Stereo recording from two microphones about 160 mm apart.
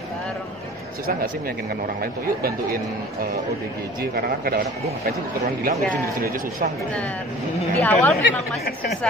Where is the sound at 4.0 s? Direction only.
70° right (ahead or behind).